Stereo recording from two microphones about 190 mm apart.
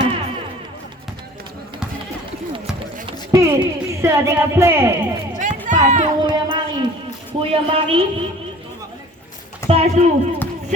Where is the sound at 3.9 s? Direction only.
15° right (ahead or behind).